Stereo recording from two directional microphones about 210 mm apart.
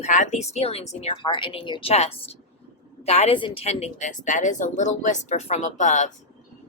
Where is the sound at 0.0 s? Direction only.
35° left (ahead or behind).